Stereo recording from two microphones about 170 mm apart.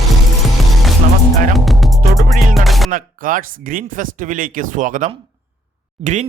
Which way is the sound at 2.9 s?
55° right (ahead or behind).